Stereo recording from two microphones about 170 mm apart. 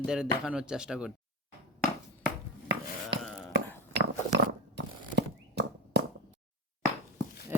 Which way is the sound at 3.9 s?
80° right.